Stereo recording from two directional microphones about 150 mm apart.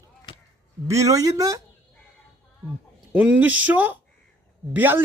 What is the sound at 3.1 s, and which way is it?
Speech, 10° right (ahead or behind).